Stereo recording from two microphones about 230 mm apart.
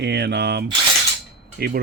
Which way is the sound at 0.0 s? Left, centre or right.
Right.